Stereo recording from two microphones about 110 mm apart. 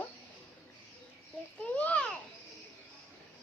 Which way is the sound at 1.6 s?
10° left (ahead or behind).